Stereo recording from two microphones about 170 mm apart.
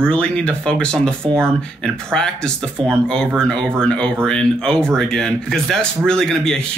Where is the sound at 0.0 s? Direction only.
5° left (ahead or behind).